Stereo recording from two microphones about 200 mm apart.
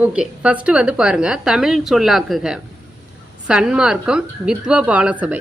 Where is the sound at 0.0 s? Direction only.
5° right (ahead or behind).